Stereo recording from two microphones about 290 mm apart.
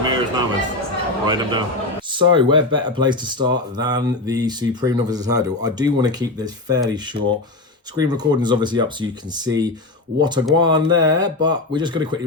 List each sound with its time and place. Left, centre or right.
0.0 s music: centre
1.3 s speech: centre
7.2 s speech: right
7.9 s speech: centre